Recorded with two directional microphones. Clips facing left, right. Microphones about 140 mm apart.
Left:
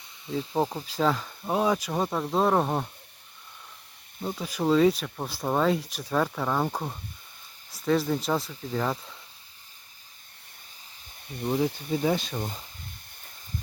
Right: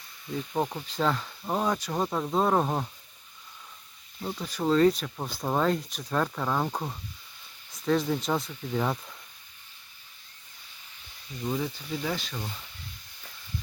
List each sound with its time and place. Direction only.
0.3 s speech: 25° left (ahead or behind)
0.9 s speech: 5° left (ahead or behind)
4.2 s speech: 5° left (ahead or behind)
11.3 s speech: 60° left (ahead or behind)
12.0 s speech: 20° left (ahead or behind)
12.4 s speech: 45° left (ahead or behind)